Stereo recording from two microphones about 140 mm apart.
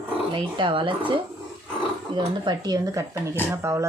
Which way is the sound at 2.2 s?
30° right (ahead or behind).